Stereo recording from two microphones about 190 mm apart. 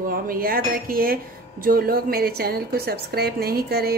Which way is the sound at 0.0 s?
50° right (ahead or behind).